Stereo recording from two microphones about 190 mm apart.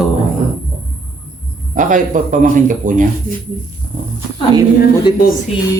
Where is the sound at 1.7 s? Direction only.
45° right (ahead or behind).